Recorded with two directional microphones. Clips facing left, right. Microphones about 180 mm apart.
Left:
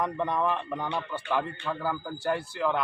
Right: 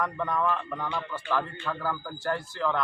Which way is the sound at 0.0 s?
20° left (ahead or behind).